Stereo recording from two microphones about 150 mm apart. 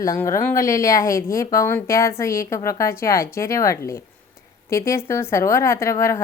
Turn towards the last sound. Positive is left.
turn(degrees=20)  # may be behind; listen again after turning